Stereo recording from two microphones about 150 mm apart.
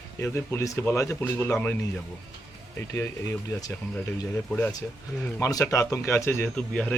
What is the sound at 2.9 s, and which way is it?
Speech, 20° left (ahead or behind).